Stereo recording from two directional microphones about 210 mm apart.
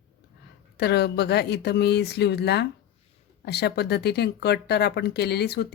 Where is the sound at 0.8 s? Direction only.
50° left (ahead or behind).